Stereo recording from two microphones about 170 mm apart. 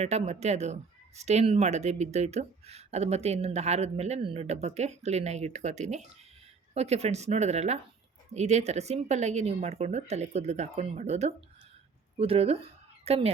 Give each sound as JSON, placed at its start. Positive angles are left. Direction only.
{"t": 0.0, "sound": "speech", "side_deg": -40}